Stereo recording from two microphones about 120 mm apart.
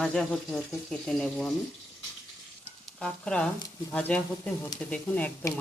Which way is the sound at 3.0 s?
5° left (ahead or behind).